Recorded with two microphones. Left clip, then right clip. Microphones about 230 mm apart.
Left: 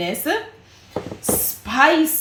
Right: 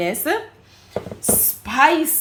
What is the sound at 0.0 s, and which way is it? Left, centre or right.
Speech, centre.